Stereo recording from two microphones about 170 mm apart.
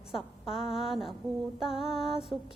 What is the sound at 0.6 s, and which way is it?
Mantra, centre (ahead or behind).